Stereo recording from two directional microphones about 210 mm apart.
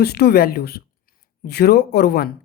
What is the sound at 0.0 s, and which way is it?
Speech, 50° left (ahead or behind).